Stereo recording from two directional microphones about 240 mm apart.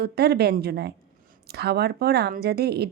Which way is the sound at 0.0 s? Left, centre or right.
Right.